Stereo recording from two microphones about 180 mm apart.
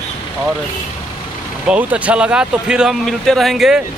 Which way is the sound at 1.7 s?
5° right (ahead or behind).